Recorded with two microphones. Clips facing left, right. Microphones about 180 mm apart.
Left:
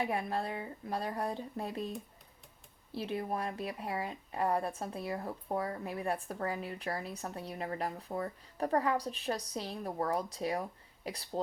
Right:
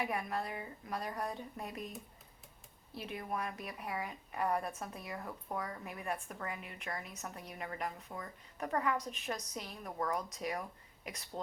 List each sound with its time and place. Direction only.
0.0 s speech: 30° left (ahead or behind)
2.9 s speech: 30° left (ahead or behind)